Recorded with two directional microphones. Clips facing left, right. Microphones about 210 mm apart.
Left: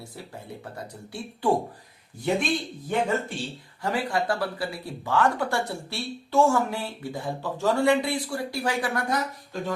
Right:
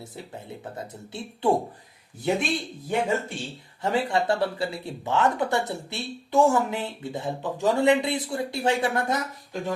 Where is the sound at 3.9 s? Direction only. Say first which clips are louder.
Right 3 dB; 25° right (ahead or behind).